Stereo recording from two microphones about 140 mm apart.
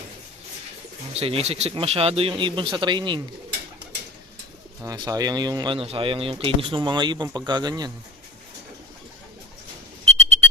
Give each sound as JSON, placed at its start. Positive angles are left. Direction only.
{"t": 1.1, "sound": "speech", "side_deg": -45}
{"t": 4.8, "sound": "speech", "side_deg": -25}